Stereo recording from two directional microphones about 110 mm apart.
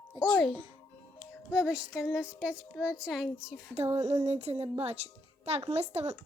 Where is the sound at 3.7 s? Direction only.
70° right (ahead or behind).